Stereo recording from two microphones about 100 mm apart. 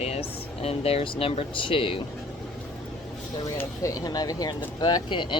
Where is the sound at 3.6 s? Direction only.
35° left (ahead or behind).